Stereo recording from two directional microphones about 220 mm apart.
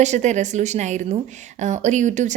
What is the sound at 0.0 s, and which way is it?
A woman's voice, 30° right (ahead or behind).